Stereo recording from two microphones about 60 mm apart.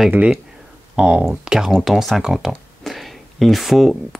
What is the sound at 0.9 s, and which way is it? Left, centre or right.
Speech, centre.